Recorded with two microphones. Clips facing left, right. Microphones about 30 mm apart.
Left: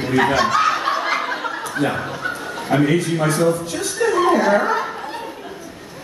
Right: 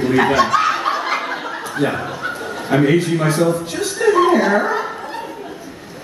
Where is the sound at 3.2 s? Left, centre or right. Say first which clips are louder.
Right 1 dB; centre.